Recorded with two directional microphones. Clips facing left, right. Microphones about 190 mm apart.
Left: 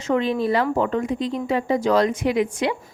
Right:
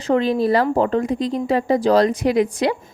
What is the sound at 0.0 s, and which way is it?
Speech, 35° right (ahead or behind).